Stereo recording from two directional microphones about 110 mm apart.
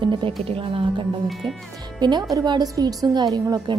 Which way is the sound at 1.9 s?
40° right (ahead or behind).